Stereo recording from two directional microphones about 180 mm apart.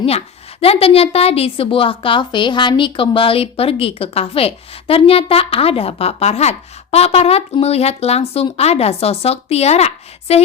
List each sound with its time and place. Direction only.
0.6 s a woman's voice: 35° left (ahead or behind)